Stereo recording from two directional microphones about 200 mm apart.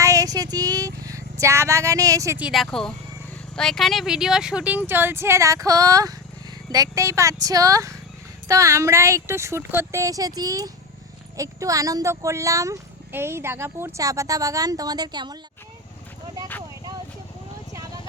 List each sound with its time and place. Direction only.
0.0 s vehicle: 15° right (ahead or behind)
2.5 s speech: centre (ahead or behind); by 15.4 s 20° right (ahead or behind)